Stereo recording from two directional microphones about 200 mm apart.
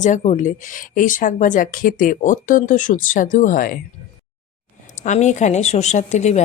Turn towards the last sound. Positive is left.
turn(degrees=35)  # may be behind; listen again after turning